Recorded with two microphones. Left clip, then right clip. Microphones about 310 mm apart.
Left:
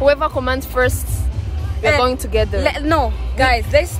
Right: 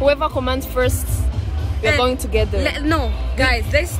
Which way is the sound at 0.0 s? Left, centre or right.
Centre.